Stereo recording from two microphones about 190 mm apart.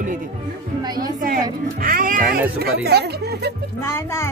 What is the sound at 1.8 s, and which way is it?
Speech, 45° right (ahead or behind).